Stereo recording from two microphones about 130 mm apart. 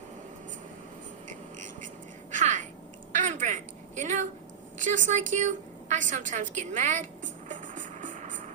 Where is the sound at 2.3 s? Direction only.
70° right (ahead or behind); by 8.1 s 90° right.